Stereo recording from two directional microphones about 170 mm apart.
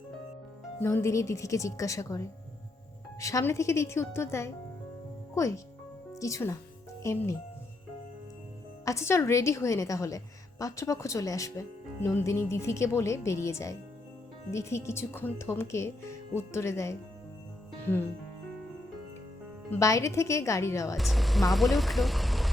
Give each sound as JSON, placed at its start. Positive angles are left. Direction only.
{"t": 0.8, "sound": "a woman's voice", "side_deg": 15}
{"t": 8.8, "sound": "a woman's voice", "side_deg": 15}
{"t": 19.8, "sound": "speech", "side_deg": 20}
{"t": 21.0, "sound": "speech", "side_deg": 0}